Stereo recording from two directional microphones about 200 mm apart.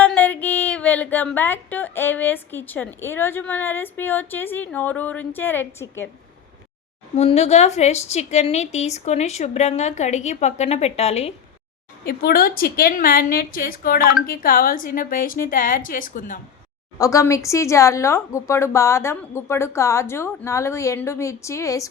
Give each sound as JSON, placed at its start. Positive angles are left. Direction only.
{"t": 0.0, "sound": "speech", "side_deg": 10}
{"t": 7.2, "sound": "a woman's voice", "side_deg": 30}
{"t": 12.0, "sound": "a woman's voice", "side_deg": 50}
{"t": 17.0, "sound": "speech", "side_deg": 15}